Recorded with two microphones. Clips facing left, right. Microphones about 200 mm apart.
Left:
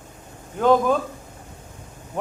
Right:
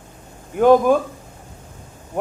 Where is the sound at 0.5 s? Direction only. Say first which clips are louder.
Right 5 dB; 15° right (ahead or behind).